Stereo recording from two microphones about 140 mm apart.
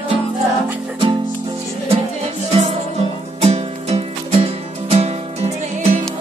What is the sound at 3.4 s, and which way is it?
Music, 50° right (ahead or behind).